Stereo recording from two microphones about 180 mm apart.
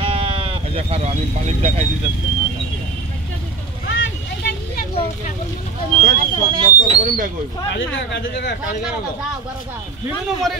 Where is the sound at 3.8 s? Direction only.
90° left.